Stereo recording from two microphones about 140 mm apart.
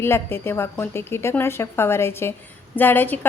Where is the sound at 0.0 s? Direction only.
15° left (ahead or behind).